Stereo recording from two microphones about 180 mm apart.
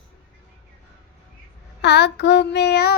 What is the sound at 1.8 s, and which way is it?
Child singing, 70° left (ahead or behind).